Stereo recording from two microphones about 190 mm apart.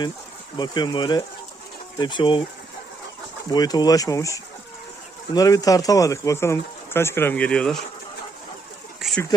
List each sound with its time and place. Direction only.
0.5 s speech: 20° left (ahead or behind)
3.5 s speech: 20° left (ahead or behind); by 7.8 s 5° left (ahead or behind)
9.0 s a sound: centre (ahead or behind)